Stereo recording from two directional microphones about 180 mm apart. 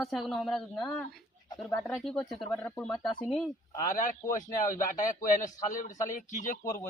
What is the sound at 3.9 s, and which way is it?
Speech, 45° left (ahead or behind).